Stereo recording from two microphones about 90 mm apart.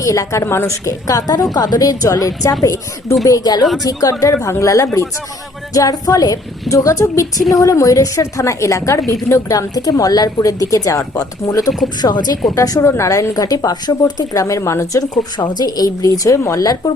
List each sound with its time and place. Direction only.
0.0 s a woman's voice: 35° left (ahead or behind)
4.4 s a woman's voice: 35° left (ahead or behind)
12.5 s a woman's voice: 35° left (ahead or behind)
15.4 s speech: 50° left (ahead or behind)